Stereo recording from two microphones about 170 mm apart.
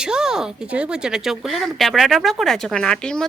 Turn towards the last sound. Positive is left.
turn(degrees=5)  # may be behind; listen again after turning